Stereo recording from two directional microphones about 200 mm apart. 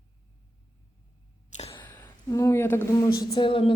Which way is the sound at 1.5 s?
30° left (ahead or behind).